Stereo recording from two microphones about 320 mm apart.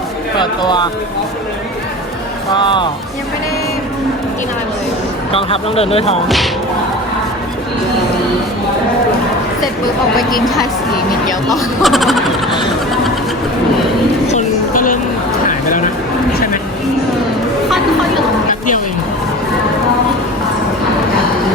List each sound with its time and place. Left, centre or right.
0.3 s speech: centre
2.6 s speech: centre
5.3 s speech: centre
6.2 s speech: centre
11.4 s speech: centre
14.3 s a sound: left